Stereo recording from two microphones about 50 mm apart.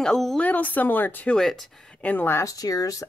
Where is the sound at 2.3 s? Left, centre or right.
Left.